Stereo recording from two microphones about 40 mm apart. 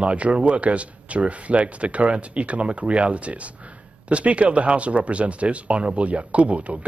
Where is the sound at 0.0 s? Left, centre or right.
Right.